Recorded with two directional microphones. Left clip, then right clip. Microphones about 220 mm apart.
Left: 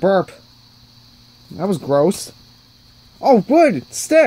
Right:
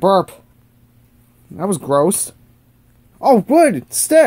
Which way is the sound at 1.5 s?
5° right (ahead or behind).